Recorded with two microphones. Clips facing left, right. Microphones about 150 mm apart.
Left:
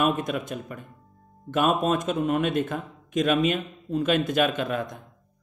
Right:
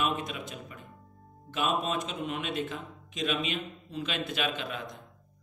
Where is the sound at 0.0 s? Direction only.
50° left (ahead or behind).